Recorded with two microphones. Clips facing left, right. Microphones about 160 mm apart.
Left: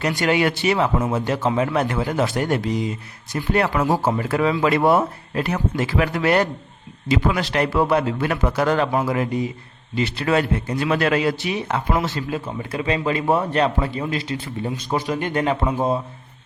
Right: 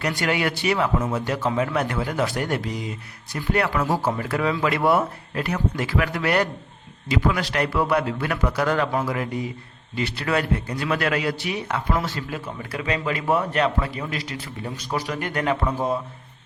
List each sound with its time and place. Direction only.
0.0 s a man's voice: 25° left (ahead or behind)